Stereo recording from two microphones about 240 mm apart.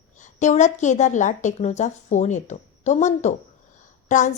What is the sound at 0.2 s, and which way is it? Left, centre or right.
A woman's voice, left.